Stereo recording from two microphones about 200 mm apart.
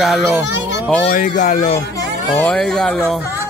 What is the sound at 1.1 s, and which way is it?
Speech, 45° left (ahead or behind).